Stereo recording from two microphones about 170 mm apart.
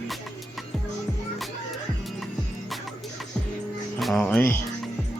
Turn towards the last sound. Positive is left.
turn(degrees=10)  # may be behind; listen again after turning